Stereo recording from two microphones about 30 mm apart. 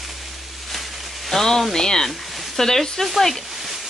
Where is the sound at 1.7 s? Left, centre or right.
Left.